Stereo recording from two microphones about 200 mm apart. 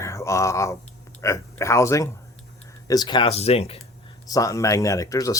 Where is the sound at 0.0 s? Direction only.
15° left (ahead or behind); by 3.8 s 30° left (ahead or behind).